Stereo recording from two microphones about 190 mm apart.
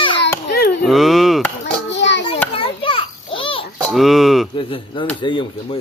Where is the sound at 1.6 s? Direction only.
70° left (ahead or behind).